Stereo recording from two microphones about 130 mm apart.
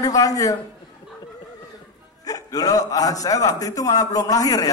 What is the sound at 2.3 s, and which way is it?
A man's voice, 30° left (ahead or behind).